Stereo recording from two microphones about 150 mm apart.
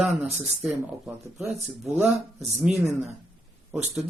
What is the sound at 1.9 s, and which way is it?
Speech, 5° right (ahead or behind).